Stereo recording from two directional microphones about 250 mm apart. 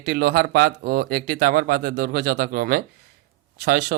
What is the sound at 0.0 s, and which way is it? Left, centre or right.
Speech, right.